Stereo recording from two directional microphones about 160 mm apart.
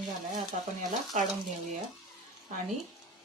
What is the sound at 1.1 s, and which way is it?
Stir, 50° right (ahead or behind).